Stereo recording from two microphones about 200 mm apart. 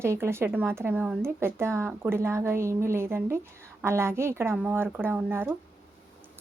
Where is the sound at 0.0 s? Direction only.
15° right (ahead or behind).